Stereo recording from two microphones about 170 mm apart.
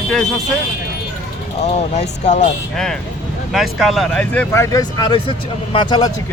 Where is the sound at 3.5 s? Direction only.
Centre (ahead or behind); by 6.1 s 25° left (ahead or behind).